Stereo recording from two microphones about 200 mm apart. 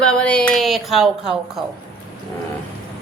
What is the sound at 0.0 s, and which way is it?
Speech, 5° left (ahead or behind).